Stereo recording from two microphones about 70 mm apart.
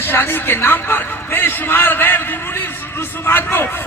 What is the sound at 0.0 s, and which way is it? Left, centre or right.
A man's voice, left.